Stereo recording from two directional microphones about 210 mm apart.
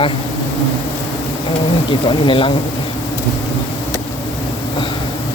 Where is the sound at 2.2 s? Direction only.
25° left (ahead or behind).